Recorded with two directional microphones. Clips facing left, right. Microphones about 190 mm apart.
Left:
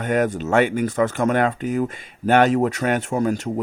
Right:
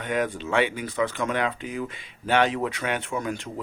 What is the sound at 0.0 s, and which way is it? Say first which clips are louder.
Speech: left 6 dB; 45° left (ahead or behind).